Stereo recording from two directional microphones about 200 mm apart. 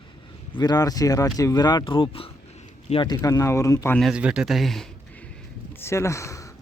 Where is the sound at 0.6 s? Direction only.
20° left (ahead or behind).